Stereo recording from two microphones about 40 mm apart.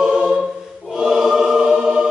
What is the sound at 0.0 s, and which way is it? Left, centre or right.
Choir, centre.